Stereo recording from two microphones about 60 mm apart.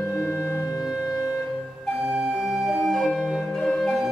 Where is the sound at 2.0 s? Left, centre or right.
Centre.